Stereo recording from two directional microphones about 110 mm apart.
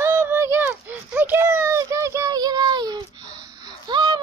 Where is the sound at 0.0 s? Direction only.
20° right (ahead or behind).